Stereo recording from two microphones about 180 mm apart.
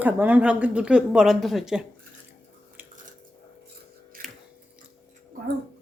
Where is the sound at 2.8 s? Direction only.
10° right (ahead or behind).